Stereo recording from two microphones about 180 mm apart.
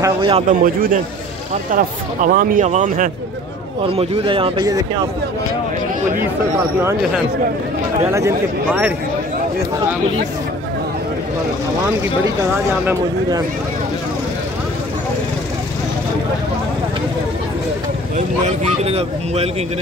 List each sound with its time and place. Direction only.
0.0 s speech: 25° right (ahead or behind)
0.5 s speech: 50° right (ahead or behind); by 4.8 s 20° right (ahead or behind)
8.0 s speech: 15° right (ahead or behind)
18.1 s speech: 40° right (ahead or behind)